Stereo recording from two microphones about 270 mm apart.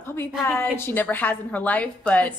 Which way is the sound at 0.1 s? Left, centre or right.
Centre.